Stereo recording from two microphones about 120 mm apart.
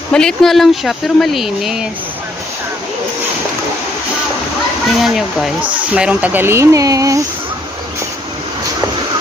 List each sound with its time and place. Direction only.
0.1 s speech: 5° left (ahead or behind)
4.9 s speech: centre (ahead or behind); by 7.2 s 30° right (ahead or behind)